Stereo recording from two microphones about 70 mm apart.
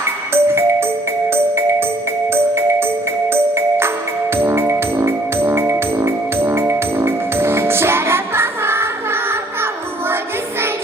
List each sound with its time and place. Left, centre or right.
0.3 s music: right
4.4 s music: right